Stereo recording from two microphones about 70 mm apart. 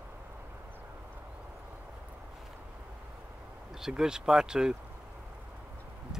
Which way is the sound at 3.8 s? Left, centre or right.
Centre.